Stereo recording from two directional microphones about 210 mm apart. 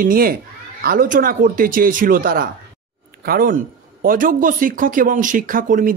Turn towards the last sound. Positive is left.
turn(degrees=-40)  # may be behind; listen again after turning